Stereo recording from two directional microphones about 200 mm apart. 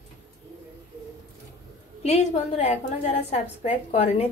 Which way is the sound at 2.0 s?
30° left (ahead or behind).